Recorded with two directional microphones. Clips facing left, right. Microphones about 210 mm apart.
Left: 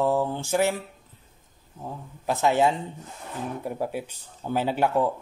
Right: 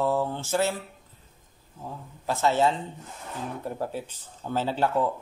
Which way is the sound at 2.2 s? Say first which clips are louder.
Left 2 dB; 15° left (ahead or behind).